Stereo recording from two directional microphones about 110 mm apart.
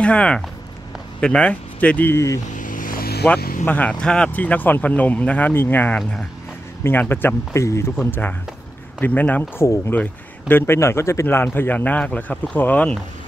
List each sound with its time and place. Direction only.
0.0 s speech: 10° left (ahead or behind); by 2.4 s 25° left (ahead or behind)
3.3 s speech: 15° left (ahead or behind)
5.9 s speech: 5° left (ahead or behind)
6.8 s speech: 20° left (ahead or behind)